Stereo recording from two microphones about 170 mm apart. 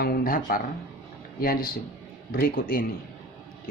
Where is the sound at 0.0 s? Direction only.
60° left (ahead or behind).